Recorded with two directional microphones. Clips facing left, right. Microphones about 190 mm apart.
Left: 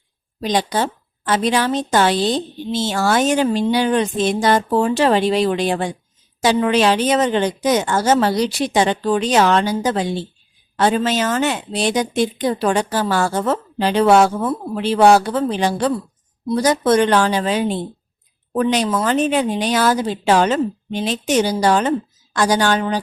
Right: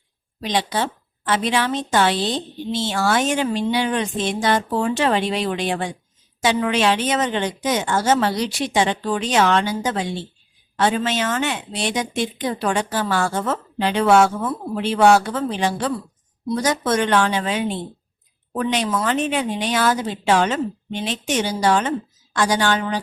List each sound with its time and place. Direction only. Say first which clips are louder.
0.4 s a woman's voice: left 3 dB; 40° left (ahead or behind)